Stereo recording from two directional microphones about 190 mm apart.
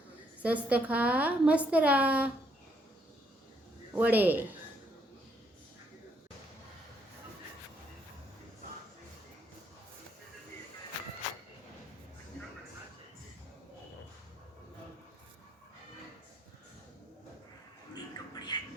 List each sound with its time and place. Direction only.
0.4 s a woman's voice: 5° right (ahead or behind)
3.9 s a woman's voice: 10° right (ahead or behind)
17.9 s a sound: 20° left (ahead or behind)